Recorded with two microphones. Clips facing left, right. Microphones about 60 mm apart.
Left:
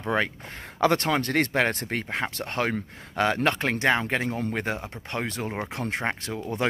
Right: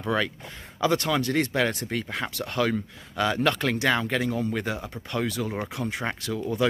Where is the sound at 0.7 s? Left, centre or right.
Left.